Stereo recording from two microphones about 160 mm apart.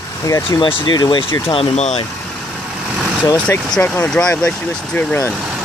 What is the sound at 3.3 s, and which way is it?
Speech, 10° left (ahead or behind).